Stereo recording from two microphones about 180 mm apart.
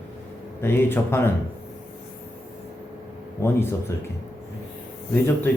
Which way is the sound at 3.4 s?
15° left (ahead or behind).